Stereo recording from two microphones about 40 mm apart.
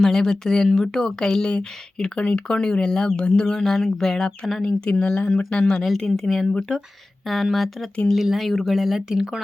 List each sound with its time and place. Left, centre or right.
0.0 s speech: centre
3.6 s speech: centre
4.6 s speech: centre
6.1 s speech: centre
6.5 s speech: left
7.5 s speech: centre
8.1 s speech: centre